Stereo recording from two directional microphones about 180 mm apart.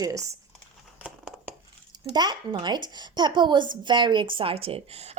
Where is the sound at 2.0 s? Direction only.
25° right (ahead or behind).